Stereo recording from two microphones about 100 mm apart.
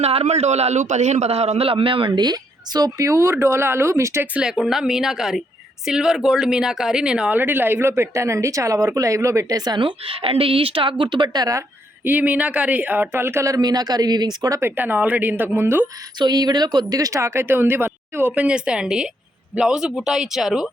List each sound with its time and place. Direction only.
0.0 s a woman's voice: 90° right; by 4.3 s 25° right (ahead or behind)
4.4 s a woman's voice: 5° right (ahead or behind)
7.3 s a woman's voice: 20° right (ahead or behind); by 11.4 s 50° right (ahead or behind)
12.0 s speech: 15° right (ahead or behind); by 14.6 s 40° right (ahead or behind)
14.6 s speech: 20° right (ahead or behind)
16.1 s speech: 45° right (ahead or behind); by 20.7 s 5° right (ahead or behind)